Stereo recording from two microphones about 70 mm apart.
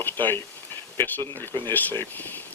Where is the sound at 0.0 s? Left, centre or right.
Left.